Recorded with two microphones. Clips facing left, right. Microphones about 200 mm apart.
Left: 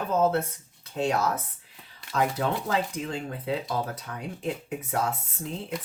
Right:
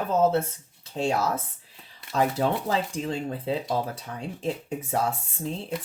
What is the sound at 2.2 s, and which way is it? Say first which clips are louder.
Speech: right 2 dB; 30° right (ahead or behind).